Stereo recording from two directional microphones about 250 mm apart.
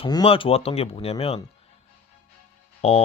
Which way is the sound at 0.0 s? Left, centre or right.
Centre.